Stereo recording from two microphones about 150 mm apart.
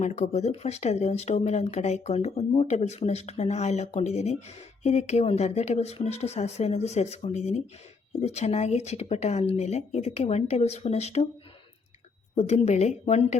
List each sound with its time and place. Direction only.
0.0 s speech: 50° left (ahead or behind)
12.4 s speech: 45° left (ahead or behind)